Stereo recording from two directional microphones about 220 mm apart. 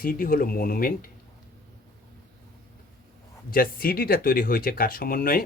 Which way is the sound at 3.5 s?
40° left (ahead or behind).